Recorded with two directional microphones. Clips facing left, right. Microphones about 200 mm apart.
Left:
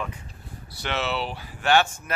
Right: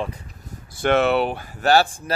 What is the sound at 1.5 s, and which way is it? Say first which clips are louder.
Speech: right 3 dB; 40° right (ahead or behind).